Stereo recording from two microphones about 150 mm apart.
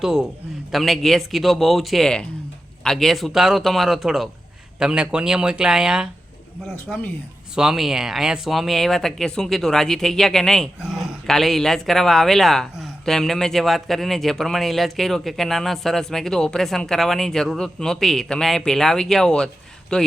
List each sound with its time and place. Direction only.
0.0 s speech: 5° right (ahead or behind)